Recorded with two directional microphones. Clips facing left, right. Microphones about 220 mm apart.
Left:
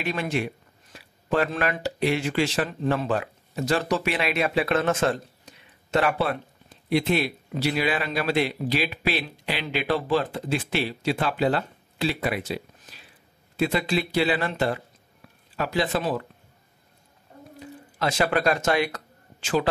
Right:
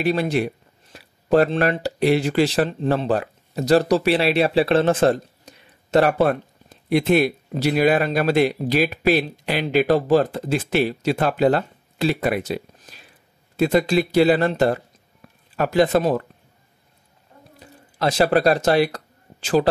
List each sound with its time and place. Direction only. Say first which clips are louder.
0.0 s speech: right 7 dB; 35° right (ahead or behind)
17.9 s speech: right 6 dB; 35° right (ahead or behind)